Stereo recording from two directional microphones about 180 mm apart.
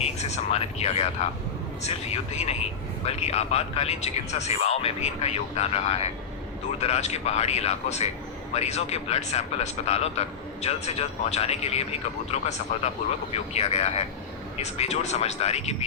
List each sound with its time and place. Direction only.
0.0 s a man's voice: 35° left (ahead or behind)